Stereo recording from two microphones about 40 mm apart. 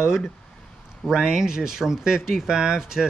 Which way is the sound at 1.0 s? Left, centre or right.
Centre.